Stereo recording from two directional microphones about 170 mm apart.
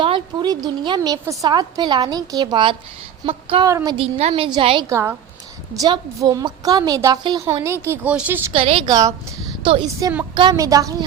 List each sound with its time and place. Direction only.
0.0 s a woman's voice: 30° right (ahead or behind)
3.7 s speech: 20° right (ahead or behind)
3.9 s a woman's voice: 35° right (ahead or behind)
4.9 s a woman's voice: 15° right (ahead or behind)
8.5 s a woman's voice: 35° right (ahead or behind)